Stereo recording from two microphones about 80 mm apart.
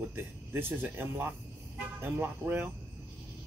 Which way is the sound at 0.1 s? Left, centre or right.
Right.